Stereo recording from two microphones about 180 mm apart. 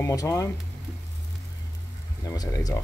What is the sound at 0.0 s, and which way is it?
Speech, 15° left (ahead or behind).